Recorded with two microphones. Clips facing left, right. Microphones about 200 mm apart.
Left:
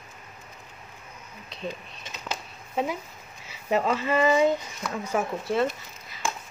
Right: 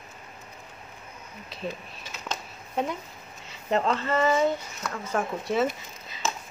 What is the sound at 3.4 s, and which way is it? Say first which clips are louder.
Speech: left 1 dB; 5° left (ahead or behind).